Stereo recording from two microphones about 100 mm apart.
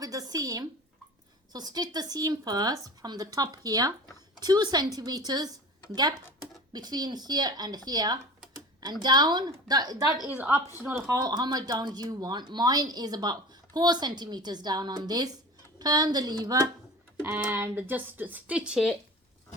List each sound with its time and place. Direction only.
0.0 s a sound: 35° right (ahead or behind)
1.5 s speech: 40° right (ahead or behind)
10.8 s speech: 25° right (ahead or behind)
11.2 s speech: 45° right (ahead or behind)
17.2 s speech: 20° right (ahead or behind); by 18.9 s 5° right (ahead or behind)